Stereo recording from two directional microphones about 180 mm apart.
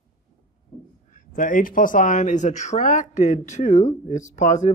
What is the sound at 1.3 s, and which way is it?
Speech, 50° left (ahead or behind).